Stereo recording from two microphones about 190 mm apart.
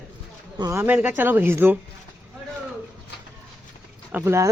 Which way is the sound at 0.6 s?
15° right (ahead or behind).